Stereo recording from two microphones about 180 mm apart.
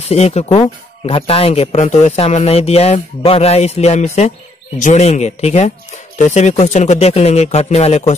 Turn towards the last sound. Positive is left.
turn(degrees=35)  # may be behind; listen again after turning